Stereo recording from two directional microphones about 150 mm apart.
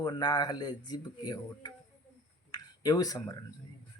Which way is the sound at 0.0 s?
30° left (ahead or behind).